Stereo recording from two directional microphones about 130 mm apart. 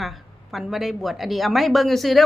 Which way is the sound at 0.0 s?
Centre (ahead or behind).